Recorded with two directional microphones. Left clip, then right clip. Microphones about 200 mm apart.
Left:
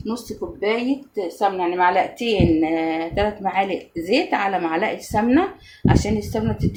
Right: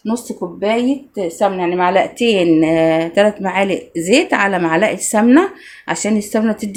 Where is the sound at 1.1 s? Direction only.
60° right (ahead or behind).